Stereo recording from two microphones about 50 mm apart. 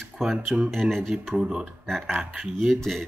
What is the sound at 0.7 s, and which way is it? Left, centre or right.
Speech, centre.